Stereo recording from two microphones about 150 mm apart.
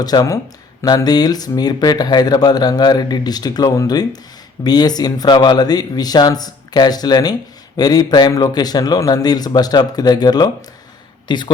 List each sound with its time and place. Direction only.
0.0 s a man's voice: 25° left (ahead or behind)